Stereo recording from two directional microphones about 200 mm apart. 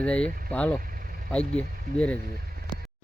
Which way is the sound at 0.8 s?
45° right (ahead or behind).